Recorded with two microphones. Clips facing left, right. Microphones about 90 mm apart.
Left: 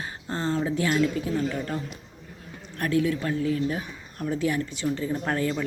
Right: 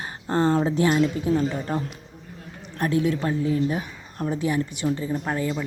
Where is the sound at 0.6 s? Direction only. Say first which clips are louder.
Right 3 dB; 25° right (ahead or behind).